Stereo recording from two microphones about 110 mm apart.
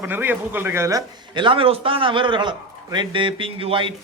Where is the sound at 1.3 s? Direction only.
50° right (ahead or behind).